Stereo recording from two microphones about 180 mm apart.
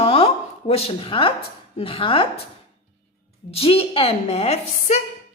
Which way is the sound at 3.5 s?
30° left (ahead or behind).